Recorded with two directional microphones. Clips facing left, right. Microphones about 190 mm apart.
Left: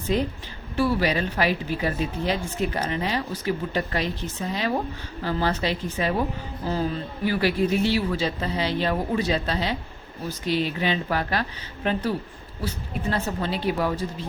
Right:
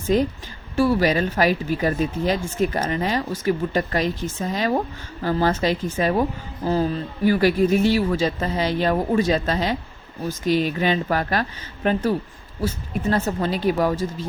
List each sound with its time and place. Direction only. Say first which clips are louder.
0.1 s speech: right 5 dB; 45° right (ahead or behind)
7.3 s speech: right 5 dB; 45° right (ahead or behind)